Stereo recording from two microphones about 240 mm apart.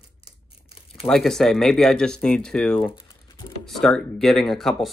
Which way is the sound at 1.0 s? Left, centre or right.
Centre.